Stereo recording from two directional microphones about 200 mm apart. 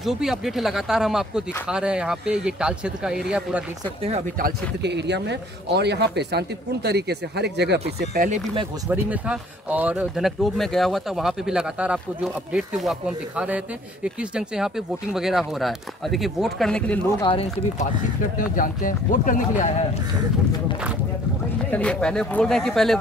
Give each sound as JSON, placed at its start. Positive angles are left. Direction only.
{"t": 0.0, "sound": "speech", "side_deg": 0}
{"t": 4.4, "sound": "speech", "side_deg": -55}
{"t": 8.0, "sound": "speech", "side_deg": -45}
{"t": 8.9, "sound": "speech", "side_deg": -5}
{"t": 14.0, "sound": "speech", "side_deg": -5}
{"t": 17.2, "sound": "speech", "side_deg": 25}
{"t": 18.5, "sound": "speech", "side_deg": 45}
{"t": 21.6, "sound": "speech", "side_deg": 5}